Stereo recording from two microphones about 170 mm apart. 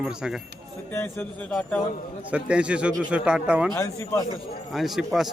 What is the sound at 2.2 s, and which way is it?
A man's voice, 5° right (ahead or behind).